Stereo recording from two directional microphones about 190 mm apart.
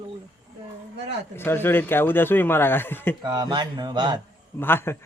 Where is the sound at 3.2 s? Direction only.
20° right (ahead or behind).